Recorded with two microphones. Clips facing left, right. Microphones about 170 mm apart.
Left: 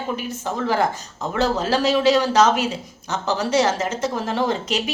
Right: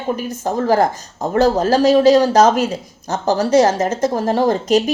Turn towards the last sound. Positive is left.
turn(degrees=-40)  # may be behind; listen again after turning